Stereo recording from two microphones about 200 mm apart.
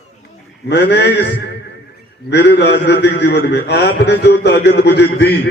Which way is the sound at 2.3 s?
60° left (ahead or behind).